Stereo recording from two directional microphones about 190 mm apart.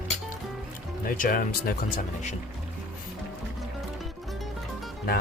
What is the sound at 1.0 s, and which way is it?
Speech, 45° left (ahead or behind).